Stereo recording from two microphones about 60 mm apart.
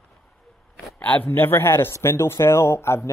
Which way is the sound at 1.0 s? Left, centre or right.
Left.